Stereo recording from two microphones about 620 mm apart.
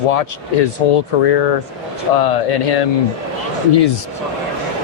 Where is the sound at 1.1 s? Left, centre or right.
Left.